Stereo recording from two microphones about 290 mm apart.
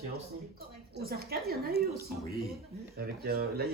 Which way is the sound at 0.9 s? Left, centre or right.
Right.